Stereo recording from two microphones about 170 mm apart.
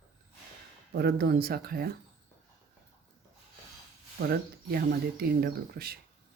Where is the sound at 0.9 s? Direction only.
65° right (ahead or behind).